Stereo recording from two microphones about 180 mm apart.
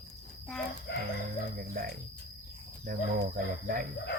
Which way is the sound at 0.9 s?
70° left (ahead or behind).